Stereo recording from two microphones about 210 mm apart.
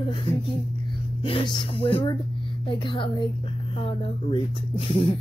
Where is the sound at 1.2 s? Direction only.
25° left (ahead or behind).